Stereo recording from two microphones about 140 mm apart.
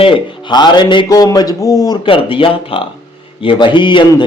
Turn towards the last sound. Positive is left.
turn(degrees=35)  # may be behind; listen again after turning